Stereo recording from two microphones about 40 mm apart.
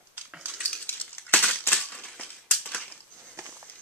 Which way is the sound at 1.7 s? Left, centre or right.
Left.